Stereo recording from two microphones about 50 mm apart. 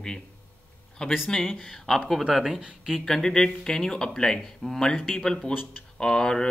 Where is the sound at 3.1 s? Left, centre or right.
Centre.